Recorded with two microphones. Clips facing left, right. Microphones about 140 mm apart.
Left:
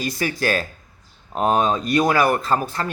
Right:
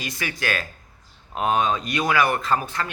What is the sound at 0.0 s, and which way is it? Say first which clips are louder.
Speech: left 6 dB; 35° left (ahead or behind).